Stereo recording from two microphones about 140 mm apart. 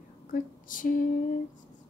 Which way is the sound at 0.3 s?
75° left (ahead or behind).